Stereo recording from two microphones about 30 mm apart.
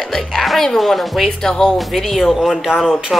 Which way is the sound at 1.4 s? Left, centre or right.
Centre.